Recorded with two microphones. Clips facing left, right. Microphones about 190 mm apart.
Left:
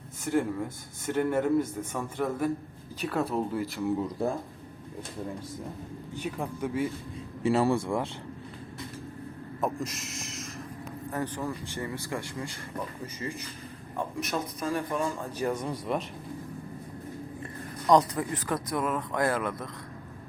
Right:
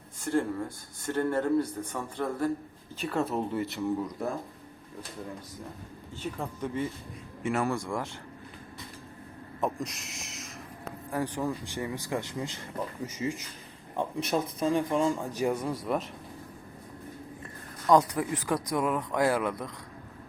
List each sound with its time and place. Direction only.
0.3 s speech: 10° left (ahead or behind)
4.2 s speech: 30° left (ahead or behind)
6.1 s speech: 10° left (ahead or behind)
7.4 s speech: 30° left (ahead or behind)
9.6 s speech: centre (ahead or behind)
11.1 s speech: 15° right (ahead or behind)
13.9 s a man's voice: 25° right (ahead or behind)
15.6 s speech: centre (ahead or behind)
17.9 s speech: 10° right (ahead or behind)